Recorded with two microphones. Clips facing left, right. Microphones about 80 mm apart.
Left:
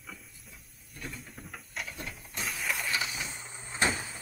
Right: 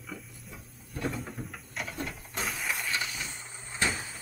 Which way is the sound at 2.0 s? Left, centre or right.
Centre.